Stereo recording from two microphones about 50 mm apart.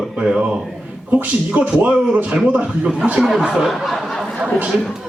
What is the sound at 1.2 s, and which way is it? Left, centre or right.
A man's voice, right.